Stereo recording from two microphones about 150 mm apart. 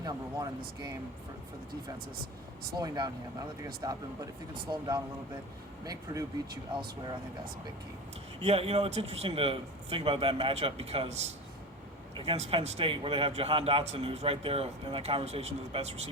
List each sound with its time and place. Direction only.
0.0 s speech: 25° right (ahead or behind)
2.7 s speech: 25° right (ahead or behind)
8.4 s a man's voice: 40° right (ahead or behind)